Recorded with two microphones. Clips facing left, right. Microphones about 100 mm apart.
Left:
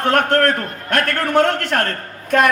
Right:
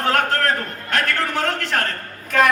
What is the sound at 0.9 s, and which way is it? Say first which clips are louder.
Speech: left 5 dB; 55° left (ahead or behind).